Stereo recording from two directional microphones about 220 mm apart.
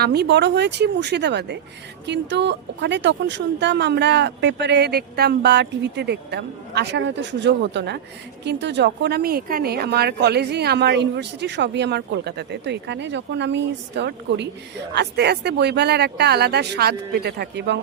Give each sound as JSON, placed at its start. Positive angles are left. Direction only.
{"t": 0.0, "sound": "speech", "side_deg": -45}